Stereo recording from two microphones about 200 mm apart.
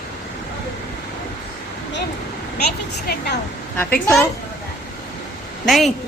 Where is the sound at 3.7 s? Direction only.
10° left (ahead or behind).